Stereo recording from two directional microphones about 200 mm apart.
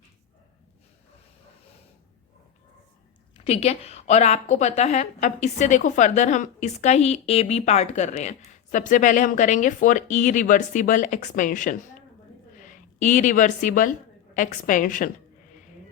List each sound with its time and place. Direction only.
3.3 s a woman's voice: 30° left (ahead or behind)